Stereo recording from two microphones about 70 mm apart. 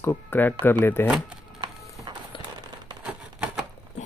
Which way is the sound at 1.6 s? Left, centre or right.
Right.